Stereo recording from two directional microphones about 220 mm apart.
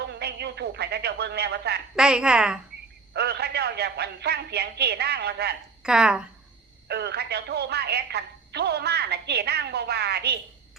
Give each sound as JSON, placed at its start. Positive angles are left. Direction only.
{"t": 0.1, "sound": "speech", "side_deg": -50}
{"t": 2.0, "sound": "a woman's voice", "side_deg": -5}
{"t": 3.1, "sound": "speech", "side_deg": -50}
{"t": 5.8, "sound": "a woman's voice", "side_deg": -5}
{"t": 6.8, "sound": "speech", "side_deg": -50}